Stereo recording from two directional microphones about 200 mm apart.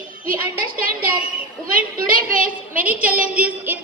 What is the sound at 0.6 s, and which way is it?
A woman's voice, 45° right (ahead or behind).